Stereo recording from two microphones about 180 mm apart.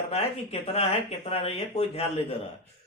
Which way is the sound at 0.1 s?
35° left (ahead or behind).